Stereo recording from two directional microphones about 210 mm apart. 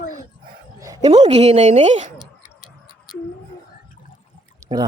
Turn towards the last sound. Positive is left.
turn(degrees=-15)  # may be behind; listen again after turning